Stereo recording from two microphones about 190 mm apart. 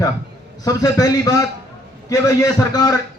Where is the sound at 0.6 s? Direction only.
20° left (ahead or behind).